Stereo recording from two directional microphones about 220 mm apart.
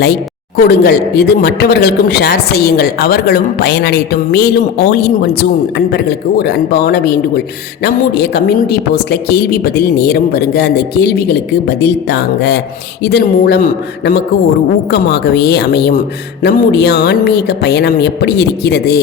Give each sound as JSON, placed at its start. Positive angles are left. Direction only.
{"t": 0.6, "sound": "speech", "side_deg": 45}